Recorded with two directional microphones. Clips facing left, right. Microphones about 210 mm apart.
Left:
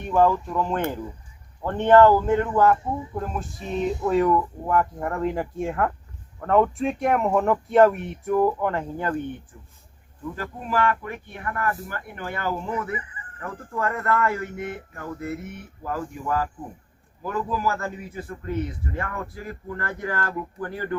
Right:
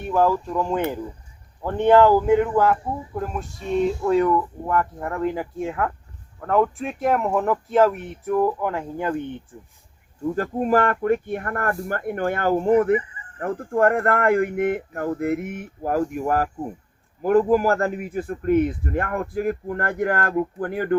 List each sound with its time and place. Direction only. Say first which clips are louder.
0.0 s speech: even; 5° right (ahead or behind)
9.5 s speech: right 6 dB; 25° right (ahead or behind)
10.3 s speech: right 7 dB; 45° right (ahead or behind)
15.2 s speech: right 5 dB; 75° right (ahead or behind); by 15.6 s 90° right
15.8 s speech: right 8 dB; 45° right (ahead or behind)
17.2 s speech: right 10 dB; 55° right (ahead or behind)